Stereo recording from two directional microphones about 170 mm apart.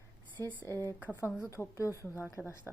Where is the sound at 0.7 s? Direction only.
15° left (ahead or behind).